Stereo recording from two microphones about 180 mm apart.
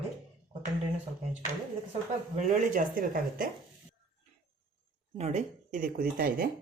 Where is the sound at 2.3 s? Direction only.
45° right (ahead or behind).